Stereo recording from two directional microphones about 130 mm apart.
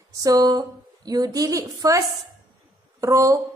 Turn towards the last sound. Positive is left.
turn(degrees=-25)  # may be behind; listen again after turning